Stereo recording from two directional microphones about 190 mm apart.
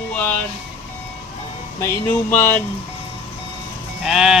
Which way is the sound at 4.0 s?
Centre (ahead or behind).